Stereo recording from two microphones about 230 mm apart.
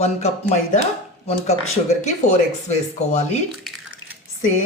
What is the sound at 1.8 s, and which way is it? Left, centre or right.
Speech, left.